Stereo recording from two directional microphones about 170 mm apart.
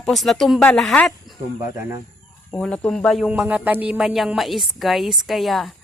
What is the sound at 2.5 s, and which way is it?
Speech, 5° left (ahead or behind).